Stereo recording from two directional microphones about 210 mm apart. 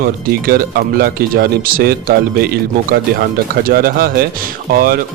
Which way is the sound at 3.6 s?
45° right (ahead or behind).